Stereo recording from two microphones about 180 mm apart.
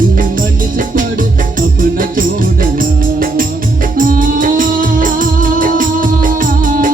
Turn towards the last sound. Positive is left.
turn(degrees=-50)  # may be behind; listen again after turning